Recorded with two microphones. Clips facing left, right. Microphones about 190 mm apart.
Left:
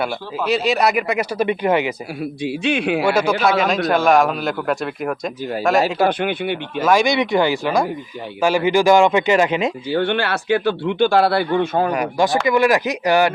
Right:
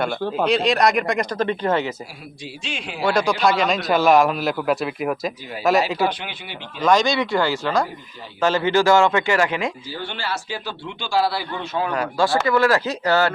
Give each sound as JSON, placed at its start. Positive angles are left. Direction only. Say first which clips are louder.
{"t": 0.4, "sound": "speech", "louder": "left 1 dB", "side_deg": 5}
{"t": 2.4, "sound": "speech", "louder": "left 13 dB", "side_deg": 60}
{"t": 3.1, "sound": "a man's voice", "louder": "right 1 dB", "side_deg": 5}
{"t": 6.0, "sound": "speech", "louder": "left 6 dB", "side_deg": 55}
{"t": 6.7, "sound": "speech", "louder": "left 1 dB", "side_deg": 5}
{"t": 9.9, "sound": "speech", "louder": "left 10 dB", "side_deg": 65}
{"t": 11.9, "sound": "speech", "louder": "left 2 dB", "side_deg": 15}